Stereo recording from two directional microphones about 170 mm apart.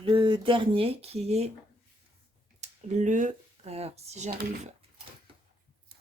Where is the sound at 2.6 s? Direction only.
45° right (ahead or behind).